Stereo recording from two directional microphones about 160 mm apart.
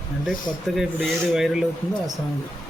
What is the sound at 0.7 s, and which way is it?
Speech, centre (ahead or behind).